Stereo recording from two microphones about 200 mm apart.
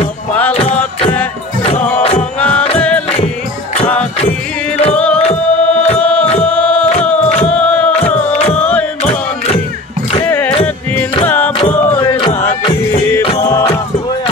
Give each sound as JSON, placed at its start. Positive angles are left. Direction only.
{"t": 0.5, "sound": "music", "side_deg": 30}
{"t": 1.8, "sound": "music", "side_deg": 10}
{"t": 4.9, "sound": "music", "side_deg": 5}
{"t": 5.2, "sound": "music", "side_deg": 30}
{"t": 5.9, "sound": "music", "side_deg": 5}
{"t": 7.4, "sound": "a sound", "side_deg": 5}
{"t": 7.9, "sound": "music", "side_deg": 30}
{"t": 11.2, "sound": "music", "side_deg": 10}